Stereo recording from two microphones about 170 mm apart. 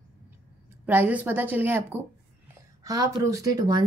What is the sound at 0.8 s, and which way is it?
Speech, 10° right (ahead or behind).